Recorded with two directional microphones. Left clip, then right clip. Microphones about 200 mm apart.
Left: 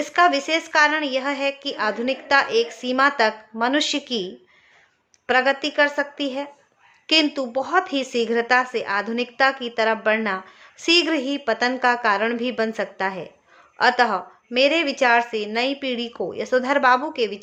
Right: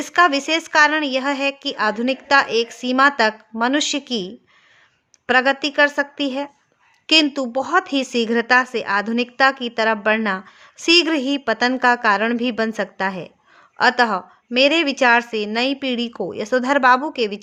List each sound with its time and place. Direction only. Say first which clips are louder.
0.0 s a woman's voice: right 2 dB; 40° right (ahead or behind)